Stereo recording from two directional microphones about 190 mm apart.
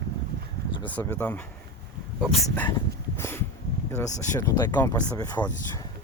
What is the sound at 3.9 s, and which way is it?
Speech, 15° left (ahead or behind).